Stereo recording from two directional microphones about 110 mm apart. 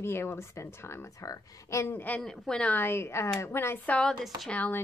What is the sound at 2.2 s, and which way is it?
Speech, 5° left (ahead or behind).